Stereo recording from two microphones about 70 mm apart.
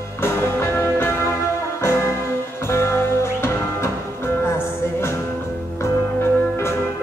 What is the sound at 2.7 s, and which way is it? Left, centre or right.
Music, left.